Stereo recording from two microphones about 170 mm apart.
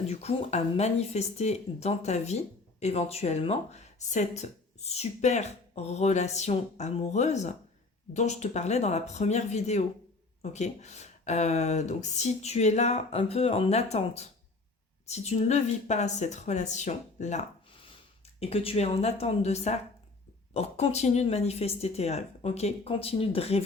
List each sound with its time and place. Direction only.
0.1 s speech: 40° left (ahead or behind)